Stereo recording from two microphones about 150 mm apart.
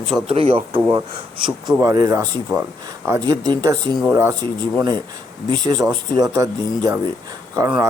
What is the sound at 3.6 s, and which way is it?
Speech, 25° right (ahead or behind).